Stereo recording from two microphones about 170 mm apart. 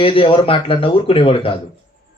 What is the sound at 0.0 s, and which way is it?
Speech, 30° left (ahead or behind).